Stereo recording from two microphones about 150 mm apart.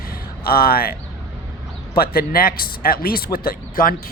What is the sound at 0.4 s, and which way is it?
Speech, 85° left.